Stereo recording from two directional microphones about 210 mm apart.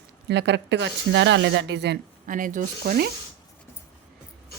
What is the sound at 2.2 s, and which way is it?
Speech, 40° right (ahead or behind).